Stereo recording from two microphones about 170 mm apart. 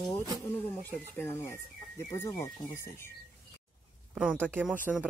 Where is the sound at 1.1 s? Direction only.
15° left (ahead or behind).